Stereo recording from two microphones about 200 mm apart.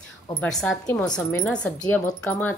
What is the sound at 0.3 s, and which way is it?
A woman's voice, 5° left (ahead or behind).